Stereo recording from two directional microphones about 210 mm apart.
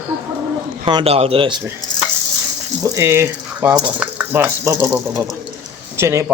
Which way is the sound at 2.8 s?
15° right (ahead or behind).